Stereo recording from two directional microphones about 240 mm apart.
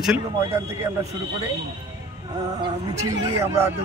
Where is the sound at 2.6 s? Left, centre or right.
Centre.